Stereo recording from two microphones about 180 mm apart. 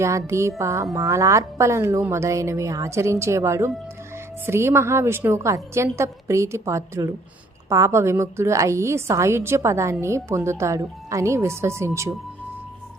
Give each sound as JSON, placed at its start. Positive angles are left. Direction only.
{"t": 0.0, "sound": "a woman's voice", "side_deg": -15}